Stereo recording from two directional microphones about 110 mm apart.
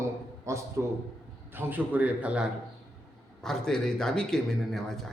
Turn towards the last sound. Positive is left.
turn(degrees=0)  # may be behind; listen again after turning